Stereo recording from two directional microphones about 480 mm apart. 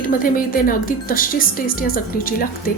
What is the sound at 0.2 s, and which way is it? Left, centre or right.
A woman's voice, centre.